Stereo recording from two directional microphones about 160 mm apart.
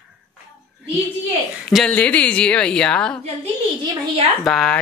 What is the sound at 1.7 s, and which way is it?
A woman's voice, 5° left (ahead or behind).